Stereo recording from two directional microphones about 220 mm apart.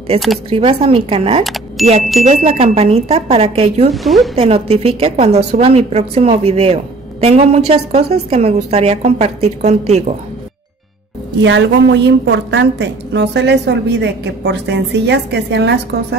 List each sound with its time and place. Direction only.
0.5 s a woman's voice: 25° right (ahead or behind)
1.8 s speech: centre (ahead or behind)
2.2 s a woman's voice: 30° right (ahead or behind)
3.9 s speech: centre (ahead or behind)
4.4 s a woman's voice: 25° right (ahead or behind)
11.4 s a woman's voice: 55° right (ahead or behind)